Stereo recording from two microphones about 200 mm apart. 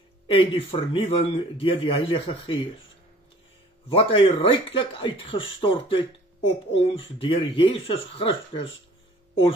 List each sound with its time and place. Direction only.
0.3 s speech: 25° left (ahead or behind)
3.9 s speech: 25° left (ahead or behind)